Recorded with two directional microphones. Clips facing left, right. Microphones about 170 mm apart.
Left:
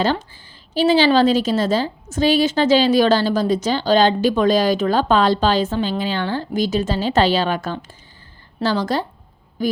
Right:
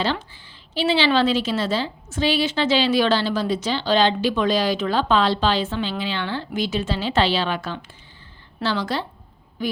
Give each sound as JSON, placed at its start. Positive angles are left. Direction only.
{"t": 0.0, "sound": "a woman's voice", "side_deg": 45}